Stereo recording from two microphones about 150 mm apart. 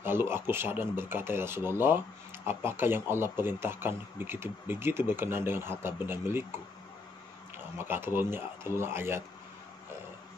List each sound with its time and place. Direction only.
0.0 s speech: 15° right (ahead or behind)
7.7 s speech: 15° right (ahead or behind)